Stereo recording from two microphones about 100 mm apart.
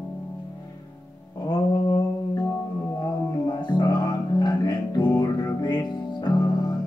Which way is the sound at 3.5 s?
45° left (ahead or behind).